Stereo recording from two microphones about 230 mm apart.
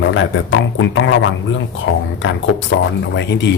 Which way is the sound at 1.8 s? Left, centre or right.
Left.